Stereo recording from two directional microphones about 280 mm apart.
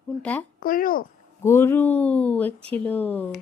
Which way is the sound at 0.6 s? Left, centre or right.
Left.